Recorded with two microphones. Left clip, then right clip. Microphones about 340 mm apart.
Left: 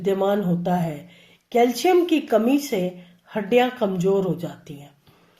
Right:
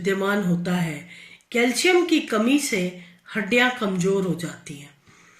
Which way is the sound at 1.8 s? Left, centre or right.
Centre.